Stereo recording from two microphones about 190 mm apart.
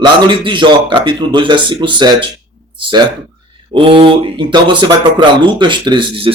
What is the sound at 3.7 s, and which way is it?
Speech, 30° right (ahead or behind).